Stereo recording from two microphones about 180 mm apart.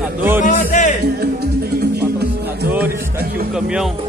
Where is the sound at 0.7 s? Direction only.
45° left (ahead or behind).